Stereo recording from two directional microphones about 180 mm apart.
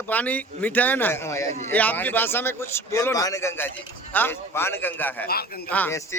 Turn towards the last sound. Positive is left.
turn(degrees=10)  # may be behind; listen again after turning